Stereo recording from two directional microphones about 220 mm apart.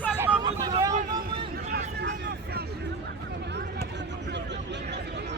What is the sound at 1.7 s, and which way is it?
Vehicle, 45° right (ahead or behind).